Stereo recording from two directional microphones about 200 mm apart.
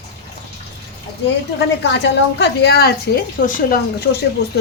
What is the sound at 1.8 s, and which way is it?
A woman's voice, 60° left (ahead or behind).